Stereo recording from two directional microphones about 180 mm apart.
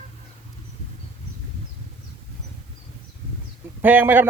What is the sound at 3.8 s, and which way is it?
Speech, 10° right (ahead or behind).